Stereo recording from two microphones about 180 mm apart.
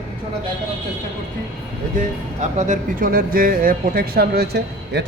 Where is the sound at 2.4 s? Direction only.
45° right (ahead or behind).